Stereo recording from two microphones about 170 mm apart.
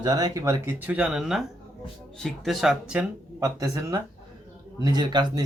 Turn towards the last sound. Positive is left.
turn(degrees=-25)  # may be behind; listen again after turning